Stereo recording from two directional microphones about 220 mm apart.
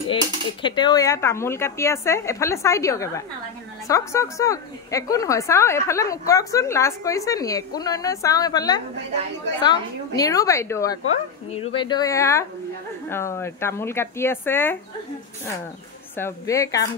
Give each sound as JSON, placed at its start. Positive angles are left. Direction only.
{"t": 0.1, "sound": "a woman's voice", "side_deg": 20}
{"t": 16.2, "sound": "a woman's voice", "side_deg": 15}